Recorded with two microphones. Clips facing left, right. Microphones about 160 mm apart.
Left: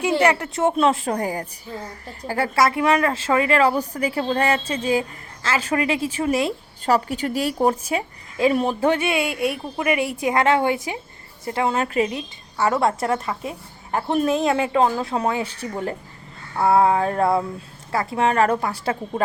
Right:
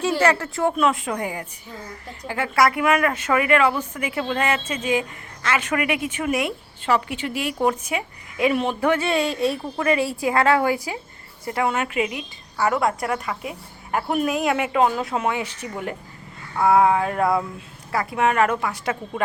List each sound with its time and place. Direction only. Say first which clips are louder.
0.1 s a woman's voice: left 2 dB; 15° left (ahead or behind); by 2.5 s 35° left (ahead or behind)
2.6 s a woman's voice: even; 25° left (ahead or behind)
9.0 s a woman's voice: right 1 dB; 10° left (ahead or behind); by 12.2 s 35° left (ahead or behind)
12.5 s a woman's voice: left 1 dB; 25° left (ahead or behind)